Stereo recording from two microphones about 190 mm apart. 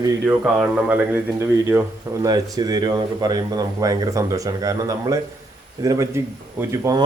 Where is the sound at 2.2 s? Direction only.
20° right (ahead or behind).